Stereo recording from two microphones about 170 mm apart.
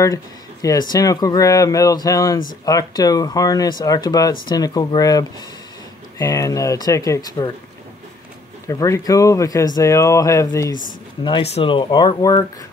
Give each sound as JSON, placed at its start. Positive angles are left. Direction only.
{"t": 0.0, "sound": "speech", "side_deg": 20}
{"t": 8.6, "sound": "speech", "side_deg": 20}
{"t": 11.2, "sound": "speech", "side_deg": 35}